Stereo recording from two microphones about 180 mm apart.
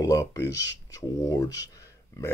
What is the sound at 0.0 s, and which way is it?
Speech, 20° left (ahead or behind).